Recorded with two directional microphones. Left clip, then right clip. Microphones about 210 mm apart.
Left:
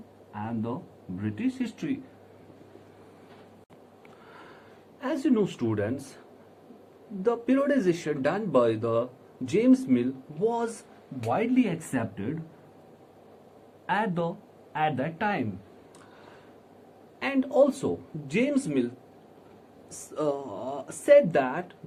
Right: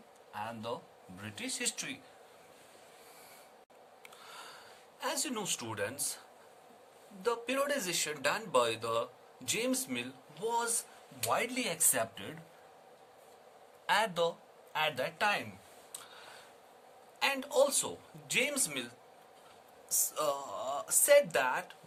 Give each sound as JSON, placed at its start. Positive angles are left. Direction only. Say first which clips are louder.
{"t": 0.3, "sound": "a sound", "louder": "left 5 dB", "side_deg": -40}
{"t": 1.2, "sound": "speech", "louder": "left 6 dB", "side_deg": -40}
{"t": 4.3, "sound": "a sound", "louder": "even", "side_deg": -40}
{"t": 4.9, "sound": "speech", "louder": "left 10 dB", "side_deg": -40}
{"t": 7.2, "sound": "speech", "louder": "left 7 dB", "side_deg": -40}
{"t": 13.8, "sound": "speech", "louder": "left 2 dB", "side_deg": -35}
{"t": 17.2, "sound": "speech", "louder": "left 6 dB", "side_deg": -40}
{"t": 20.1, "sound": "speech", "louder": "left 7 dB", "side_deg": -45}